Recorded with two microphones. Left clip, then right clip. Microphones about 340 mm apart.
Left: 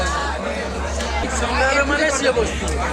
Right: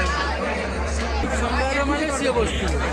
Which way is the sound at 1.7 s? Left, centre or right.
Left.